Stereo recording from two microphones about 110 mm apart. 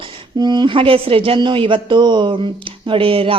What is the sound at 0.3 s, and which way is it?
Speech, 40° right (ahead or behind).